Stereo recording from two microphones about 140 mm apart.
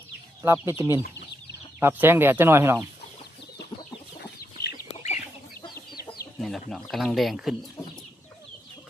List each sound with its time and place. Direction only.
0.4 s speech: 20° right (ahead or behind)
4.5 s chicken: 55° left (ahead or behind)
6.4 s speech: centre (ahead or behind)